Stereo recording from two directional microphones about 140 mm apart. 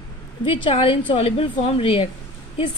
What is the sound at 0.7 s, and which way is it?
A woman's voice, 40° left (ahead or behind).